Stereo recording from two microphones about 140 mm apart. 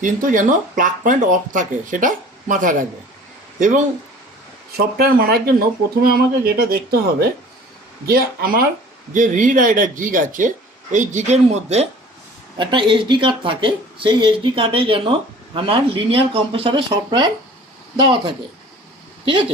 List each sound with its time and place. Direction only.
0.3 s speech: 70° right (ahead or behind)
4.9 s speech: 90° right
9.1 s speech: 65° right (ahead or behind)
10.9 s speech: 60° right (ahead or behind)
12.5 s speech: 35° right (ahead or behind)